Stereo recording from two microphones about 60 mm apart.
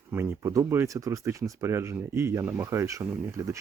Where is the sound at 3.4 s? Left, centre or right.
Right.